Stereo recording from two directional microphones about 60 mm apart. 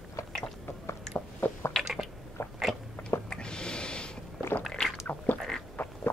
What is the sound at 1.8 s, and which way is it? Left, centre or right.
Chewing, centre.